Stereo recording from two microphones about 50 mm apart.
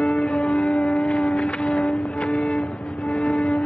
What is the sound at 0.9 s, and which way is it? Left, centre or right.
Music, centre.